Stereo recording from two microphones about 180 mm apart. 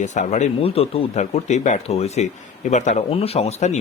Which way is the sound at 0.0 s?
40° left (ahead or behind).